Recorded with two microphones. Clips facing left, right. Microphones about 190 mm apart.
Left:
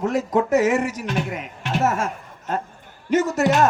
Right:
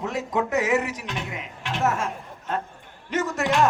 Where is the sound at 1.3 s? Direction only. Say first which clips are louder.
Left 4 dB; 45° left (ahead or behind).